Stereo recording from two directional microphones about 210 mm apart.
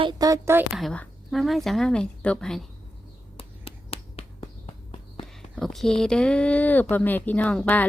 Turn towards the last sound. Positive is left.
turn(degrees=5)  # may be behind; listen again after turning